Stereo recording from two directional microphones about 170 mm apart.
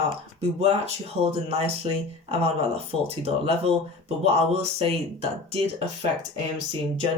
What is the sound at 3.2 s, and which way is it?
Speech, 35° right (ahead or behind).